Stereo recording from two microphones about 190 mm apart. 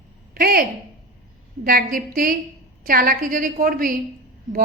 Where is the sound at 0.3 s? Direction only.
50° right (ahead or behind).